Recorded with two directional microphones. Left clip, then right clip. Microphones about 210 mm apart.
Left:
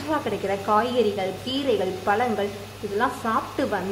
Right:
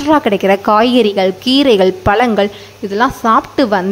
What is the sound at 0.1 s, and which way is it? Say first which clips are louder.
A woman's voice: right 15 dB; 55° right (ahead or behind).